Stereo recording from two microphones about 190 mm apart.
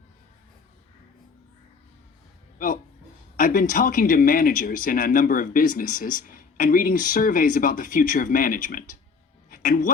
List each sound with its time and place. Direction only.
3.3 s speech: 45° left (ahead or behind)
9.5 s music: 45° left (ahead or behind)